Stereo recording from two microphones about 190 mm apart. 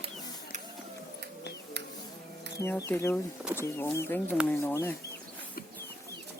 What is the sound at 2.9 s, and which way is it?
Speech, 10° left (ahead or behind).